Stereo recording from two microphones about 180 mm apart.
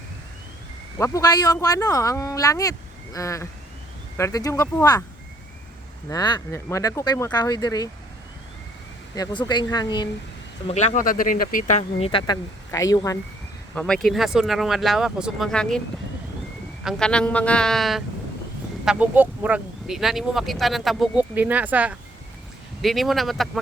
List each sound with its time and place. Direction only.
0.9 s speech: 15° left (ahead or behind)
6.1 s speech: 20° left (ahead or behind)
9.1 s speech: 25° left (ahead or behind)
10.7 s speech: 40° left (ahead or behind)
11.8 s speech: 30° left (ahead or behind)
12.2 s speech: 20° left (ahead or behind)
13.7 s speech: 5° left (ahead or behind)
16.8 s speech: 5° left (ahead or behind)